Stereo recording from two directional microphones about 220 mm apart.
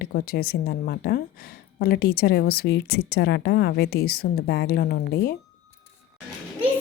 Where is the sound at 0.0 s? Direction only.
45° left (ahead or behind).